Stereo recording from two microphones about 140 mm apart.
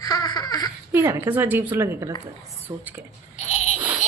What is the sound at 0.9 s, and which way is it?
A woman's voice, 15° right (ahead or behind).